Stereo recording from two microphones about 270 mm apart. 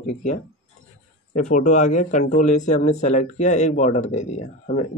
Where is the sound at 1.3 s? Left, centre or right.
Left.